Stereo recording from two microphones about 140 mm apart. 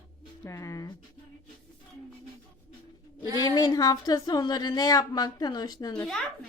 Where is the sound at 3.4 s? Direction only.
30° left (ahead or behind).